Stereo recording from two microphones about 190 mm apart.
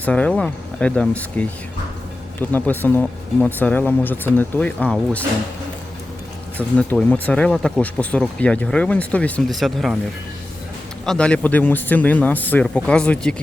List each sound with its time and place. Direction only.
0.0 s speech: 5° left (ahead or behind)
6.6 s speech: 5° left (ahead or behind)
11.0 s speech: 5° left (ahead or behind)